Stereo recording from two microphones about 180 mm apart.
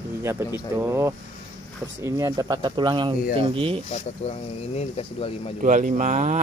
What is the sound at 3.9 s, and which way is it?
Speech, 35° left (ahead or behind).